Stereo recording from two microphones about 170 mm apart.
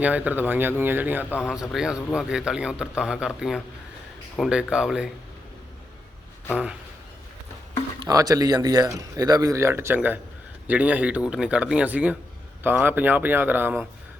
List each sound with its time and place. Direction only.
0.0 s speech: 10° right (ahead or behind)
7.9 s speech: 20° right (ahead or behind)